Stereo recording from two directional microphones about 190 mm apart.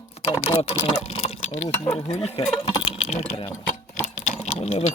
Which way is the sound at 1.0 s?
35° left (ahead or behind).